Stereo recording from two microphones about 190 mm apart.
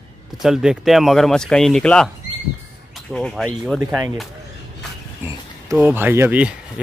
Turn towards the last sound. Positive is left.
turn(degrees=-5)  # may be behind; listen again after turning